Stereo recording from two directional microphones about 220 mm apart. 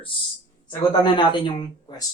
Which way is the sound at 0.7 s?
20° left (ahead or behind).